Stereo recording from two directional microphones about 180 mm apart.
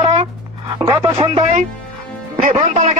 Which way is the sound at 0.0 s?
30° right (ahead or behind).